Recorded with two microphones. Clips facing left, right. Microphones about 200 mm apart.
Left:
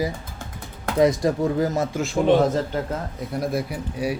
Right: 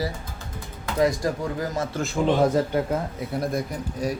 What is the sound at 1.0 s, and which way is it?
Speech, 20° left (ahead or behind).